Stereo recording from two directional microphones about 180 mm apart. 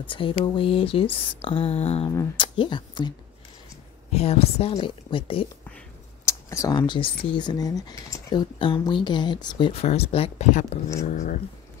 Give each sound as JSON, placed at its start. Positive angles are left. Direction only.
{"t": 0.0, "sound": "speech", "side_deg": 30}
{"t": 2.0, "sound": "speech", "side_deg": 25}
{"t": 4.1, "sound": "speech", "side_deg": 35}
{"t": 6.2, "sound": "speech", "side_deg": 15}